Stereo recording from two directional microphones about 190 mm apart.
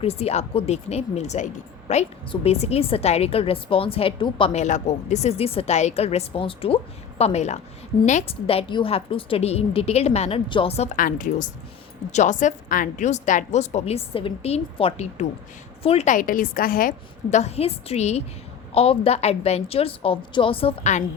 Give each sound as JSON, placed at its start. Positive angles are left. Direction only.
{"t": 0.0, "sound": "a woman's voice", "side_deg": 30}
{"t": 10.9, "sound": "a woman's voice", "side_deg": 45}
{"t": 17.3, "sound": "a woman's voice", "side_deg": 35}